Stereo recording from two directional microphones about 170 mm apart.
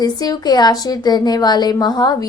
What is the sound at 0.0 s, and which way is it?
A woman's voice, 25° left (ahead or behind).